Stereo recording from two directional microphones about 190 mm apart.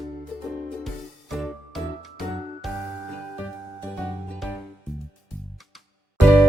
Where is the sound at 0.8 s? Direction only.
Centre (ahead or behind).